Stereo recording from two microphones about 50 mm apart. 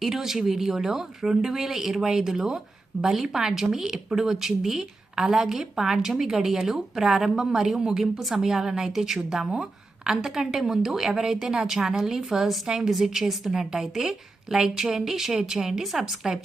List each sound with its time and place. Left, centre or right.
0.0 s a woman's voice: centre
9.5 s a sound: right
10.1 s a woman's voice: centre